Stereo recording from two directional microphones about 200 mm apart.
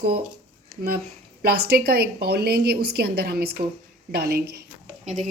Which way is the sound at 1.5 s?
50° right (ahead or behind).